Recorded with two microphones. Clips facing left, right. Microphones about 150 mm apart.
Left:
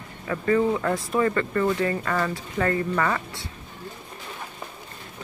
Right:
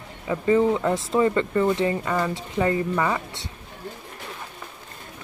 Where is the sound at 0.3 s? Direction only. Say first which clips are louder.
Right 2 dB; 20° right (ahead or behind).